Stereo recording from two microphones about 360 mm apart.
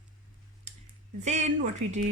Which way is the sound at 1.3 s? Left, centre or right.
Centre.